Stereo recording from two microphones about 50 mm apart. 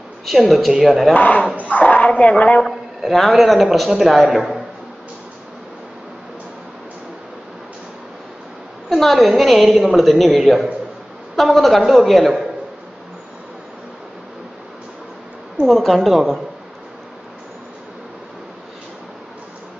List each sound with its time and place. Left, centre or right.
0.2 s a man's voice: centre
1.1 s speech: left
3.0 s a man's voice: centre
8.8 s a man's voice: centre
15.6 s a man's voice: centre